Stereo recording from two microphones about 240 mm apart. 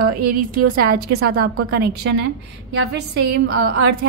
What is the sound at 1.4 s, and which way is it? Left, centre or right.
A woman's voice, right.